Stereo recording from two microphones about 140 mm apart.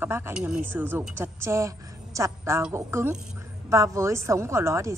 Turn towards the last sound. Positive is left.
turn(degrees=-20)  # may be behind; listen again after turning